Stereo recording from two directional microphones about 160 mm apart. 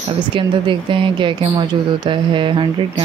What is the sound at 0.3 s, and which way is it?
Speech, 30° right (ahead or behind).